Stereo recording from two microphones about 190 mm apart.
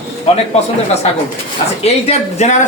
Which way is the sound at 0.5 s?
35° left (ahead or behind).